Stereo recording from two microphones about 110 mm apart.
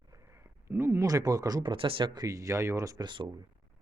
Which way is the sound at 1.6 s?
55° right (ahead or behind).